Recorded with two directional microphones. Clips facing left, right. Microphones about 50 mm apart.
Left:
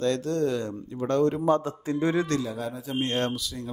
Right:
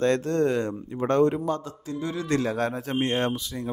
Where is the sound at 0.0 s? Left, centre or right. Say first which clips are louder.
Right 3 dB; right.